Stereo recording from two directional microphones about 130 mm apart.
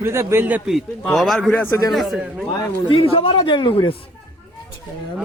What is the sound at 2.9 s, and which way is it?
A man's voice, 45° left (ahead or behind).